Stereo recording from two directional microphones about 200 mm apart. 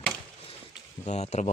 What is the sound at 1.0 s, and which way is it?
Speech, 35° left (ahead or behind).